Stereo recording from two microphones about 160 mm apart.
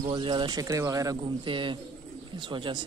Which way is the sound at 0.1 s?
30° right (ahead or behind).